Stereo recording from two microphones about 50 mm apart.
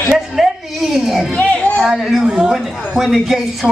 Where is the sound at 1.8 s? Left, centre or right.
Centre.